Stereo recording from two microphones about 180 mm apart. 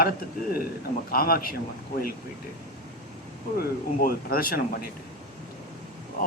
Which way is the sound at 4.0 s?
55° left (ahead or behind).